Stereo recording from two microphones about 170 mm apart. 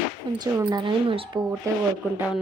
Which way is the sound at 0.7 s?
25° right (ahead or behind).